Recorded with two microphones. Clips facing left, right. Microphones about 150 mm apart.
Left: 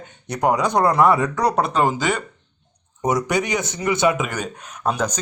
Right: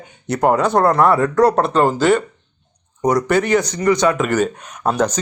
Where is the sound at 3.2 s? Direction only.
15° left (ahead or behind).